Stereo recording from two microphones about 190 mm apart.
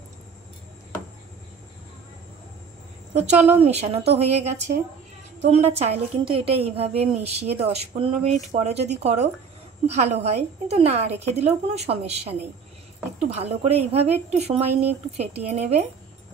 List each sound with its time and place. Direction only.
3.3 s a woman's voice: 35° right (ahead or behind)